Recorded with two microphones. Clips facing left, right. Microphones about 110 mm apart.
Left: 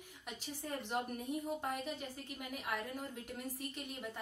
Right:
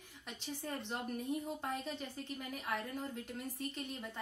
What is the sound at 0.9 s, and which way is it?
A woman's voice, 15° left (ahead or behind).